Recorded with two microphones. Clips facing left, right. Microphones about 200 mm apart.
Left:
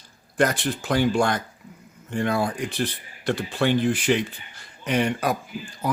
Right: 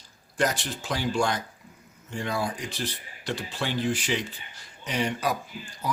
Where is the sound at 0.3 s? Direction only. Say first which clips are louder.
Left 5 dB; 55° left (ahead or behind).